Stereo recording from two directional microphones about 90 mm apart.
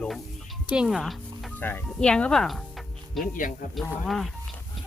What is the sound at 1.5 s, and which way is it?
Speech, 20° left (ahead or behind).